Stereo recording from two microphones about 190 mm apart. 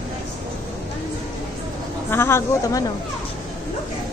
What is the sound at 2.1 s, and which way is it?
Speech, 15° left (ahead or behind).